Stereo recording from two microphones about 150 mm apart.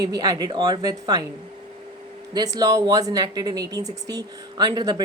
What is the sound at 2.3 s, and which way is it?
A woman's voice, 25° right (ahead or behind).